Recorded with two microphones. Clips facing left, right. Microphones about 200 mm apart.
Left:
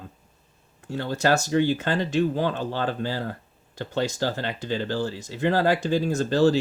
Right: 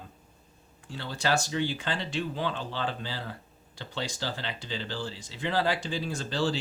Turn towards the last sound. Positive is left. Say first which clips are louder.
# left 10 dB
turn(degrees=45)  # may be behind; listen again after turning